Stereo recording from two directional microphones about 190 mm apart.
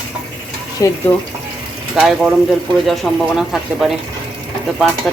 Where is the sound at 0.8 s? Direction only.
15° left (ahead or behind).